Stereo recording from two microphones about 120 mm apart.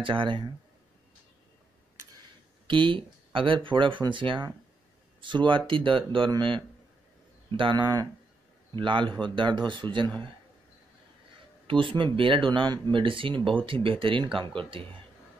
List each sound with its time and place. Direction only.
0.0 s speech: 45° right (ahead or behind)
2.6 s speech: 45° right (ahead or behind)
11.6 s speech: 45° right (ahead or behind)